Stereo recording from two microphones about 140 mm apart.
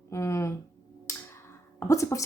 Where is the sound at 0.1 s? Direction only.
20° left (ahead or behind).